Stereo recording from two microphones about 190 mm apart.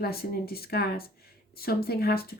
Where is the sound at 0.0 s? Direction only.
55° left (ahead or behind).